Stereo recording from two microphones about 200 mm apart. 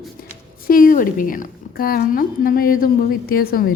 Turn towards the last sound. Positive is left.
turn(degrees=50)  # may be behind; listen again after turning